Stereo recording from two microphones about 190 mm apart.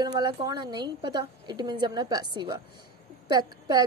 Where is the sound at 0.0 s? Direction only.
20° right (ahead or behind).